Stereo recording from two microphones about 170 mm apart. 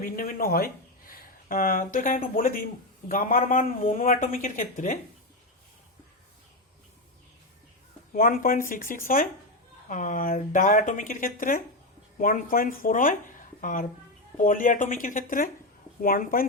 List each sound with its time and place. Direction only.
0.0 s speech: 55° left (ahead or behind)
8.1 s speech: 55° left (ahead or behind)